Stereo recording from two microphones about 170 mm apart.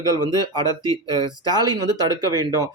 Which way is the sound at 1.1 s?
25° right (ahead or behind).